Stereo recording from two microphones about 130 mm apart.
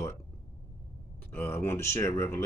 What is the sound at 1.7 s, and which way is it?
Speech, 20° left (ahead or behind).